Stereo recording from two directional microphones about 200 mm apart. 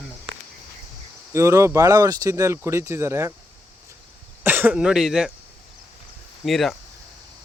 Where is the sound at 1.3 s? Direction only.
15° right (ahead or behind).